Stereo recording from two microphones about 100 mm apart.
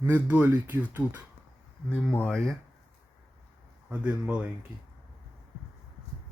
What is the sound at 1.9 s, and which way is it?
Speech, 15° left (ahead or behind).